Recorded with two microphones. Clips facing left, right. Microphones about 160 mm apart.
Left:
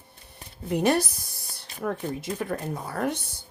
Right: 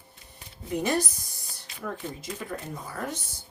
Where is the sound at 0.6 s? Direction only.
60° left (ahead or behind).